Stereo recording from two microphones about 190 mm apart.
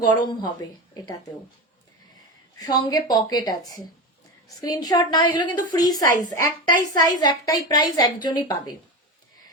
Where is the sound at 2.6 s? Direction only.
20° left (ahead or behind).